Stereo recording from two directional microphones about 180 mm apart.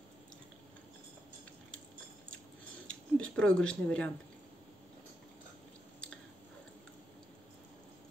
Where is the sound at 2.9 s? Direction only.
5° left (ahead or behind).